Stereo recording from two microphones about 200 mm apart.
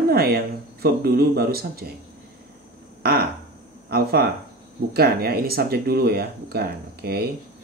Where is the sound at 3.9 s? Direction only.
50° right (ahead or behind).